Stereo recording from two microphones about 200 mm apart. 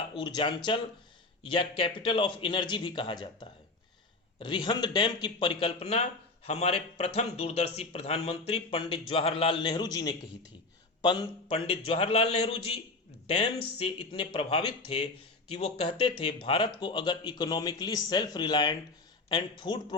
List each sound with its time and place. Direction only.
0.1 s speech: 20° left (ahead or behind)